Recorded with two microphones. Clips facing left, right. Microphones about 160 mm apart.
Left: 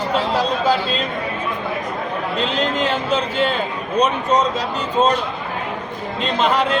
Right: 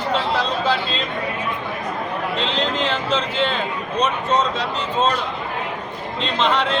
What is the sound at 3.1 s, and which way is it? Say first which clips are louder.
Speech: left 2 dB; 40° left (ahead or behind).